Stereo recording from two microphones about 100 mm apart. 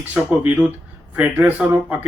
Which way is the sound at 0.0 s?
15° right (ahead or behind).